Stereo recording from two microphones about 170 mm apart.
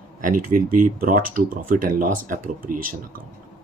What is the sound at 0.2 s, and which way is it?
Speech, 55° right (ahead or behind).